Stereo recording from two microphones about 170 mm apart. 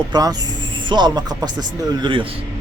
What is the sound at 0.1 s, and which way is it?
Speech, 20° right (ahead or behind).